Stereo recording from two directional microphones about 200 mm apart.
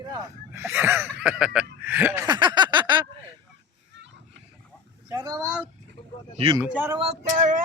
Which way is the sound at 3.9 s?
60° right (ahead or behind).